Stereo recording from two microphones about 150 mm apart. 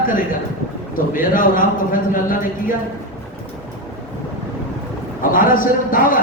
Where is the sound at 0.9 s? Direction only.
65° left (ahead or behind).